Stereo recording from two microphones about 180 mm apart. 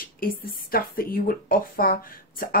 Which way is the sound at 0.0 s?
55° left (ahead or behind).